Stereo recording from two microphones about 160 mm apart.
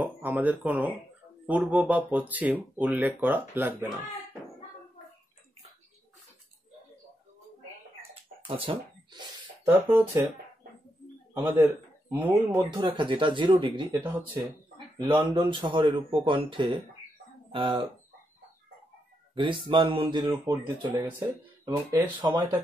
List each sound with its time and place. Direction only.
0.0 s a sound: 10° right (ahead or behind)
0.7 s speech: 10° right (ahead or behind)
8.5 s speech: 35° right (ahead or behind)
11.3 s a man's voice: 15° right (ahead or behind)
12.4 s speech: 25° right (ahead or behind)
19.3 s speech: 30° right (ahead or behind); by 21.3 s 15° right (ahead or behind)
21.6 s speech: 25° right (ahead or behind)